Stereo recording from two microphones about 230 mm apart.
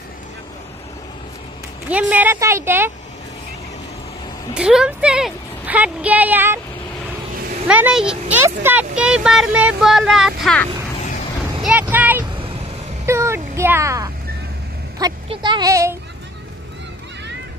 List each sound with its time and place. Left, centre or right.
1.9 s speech: centre
4.6 s a woman's voice: centre
7.6 s speech: centre
13.0 s a sound: centre
15.0 s speech: centre